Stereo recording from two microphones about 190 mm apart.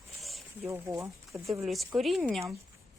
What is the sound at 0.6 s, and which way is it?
Speech, 15° right (ahead or behind).